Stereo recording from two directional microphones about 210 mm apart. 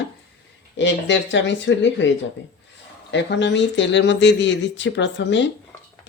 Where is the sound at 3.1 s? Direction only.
55° left (ahead or behind).